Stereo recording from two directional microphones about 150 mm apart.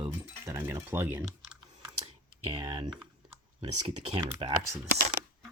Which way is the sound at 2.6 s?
35° right (ahead or behind).